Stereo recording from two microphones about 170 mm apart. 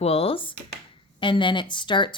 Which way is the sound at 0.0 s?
35° left (ahead or behind).